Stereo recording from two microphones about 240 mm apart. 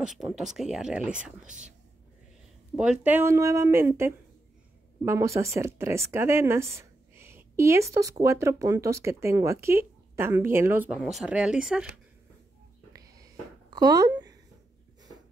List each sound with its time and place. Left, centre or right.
0.2 s speech: centre
2.7 s speech: centre
12.9 s a sound: centre